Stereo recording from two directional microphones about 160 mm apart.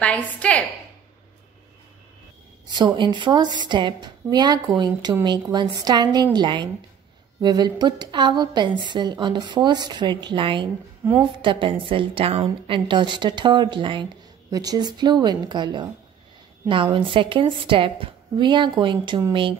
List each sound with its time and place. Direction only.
0.0 s a woman's voice: 10° left (ahead or behind)
2.7 s a woman's voice: 30° right (ahead or behind)